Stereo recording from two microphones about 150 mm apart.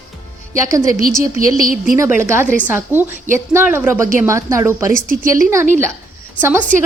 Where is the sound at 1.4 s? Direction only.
70° right (ahead or behind).